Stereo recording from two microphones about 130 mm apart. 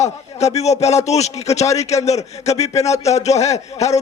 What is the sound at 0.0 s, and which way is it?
A man's voice, 55° left (ahead or behind).